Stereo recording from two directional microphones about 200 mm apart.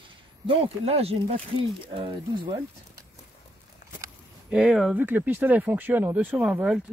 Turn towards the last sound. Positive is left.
turn(degrees=-5)  # may be behind; listen again after turning